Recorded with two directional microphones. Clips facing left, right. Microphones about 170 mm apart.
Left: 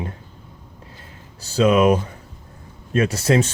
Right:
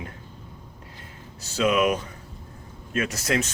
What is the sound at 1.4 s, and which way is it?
Speech, 35° left (ahead or behind).